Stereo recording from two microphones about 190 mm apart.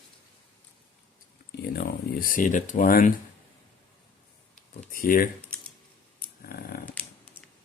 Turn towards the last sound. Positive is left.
turn(degrees=50)  # may be behind; listen again after turning